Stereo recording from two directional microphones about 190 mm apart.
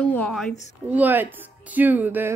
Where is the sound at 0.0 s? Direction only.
5° left (ahead or behind).